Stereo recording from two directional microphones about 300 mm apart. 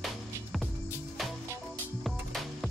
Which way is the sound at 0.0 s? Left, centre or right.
Centre.